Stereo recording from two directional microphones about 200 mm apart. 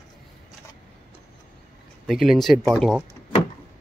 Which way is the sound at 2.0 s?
Centre (ahead or behind).